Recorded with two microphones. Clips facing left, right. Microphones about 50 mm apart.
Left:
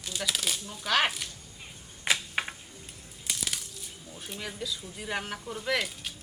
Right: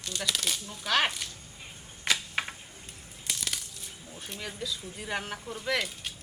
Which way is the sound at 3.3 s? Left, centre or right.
Centre.